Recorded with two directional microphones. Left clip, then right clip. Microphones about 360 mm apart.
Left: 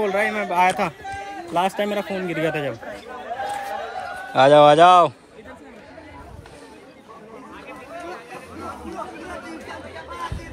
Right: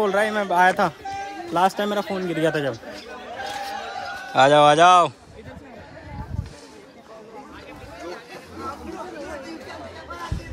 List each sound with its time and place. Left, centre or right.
0.0 s speech: centre
3.1 s a sound: centre
4.3 s speech: centre